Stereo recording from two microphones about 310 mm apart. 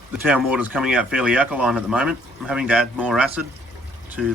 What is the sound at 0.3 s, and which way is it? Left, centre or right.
Speech, centre.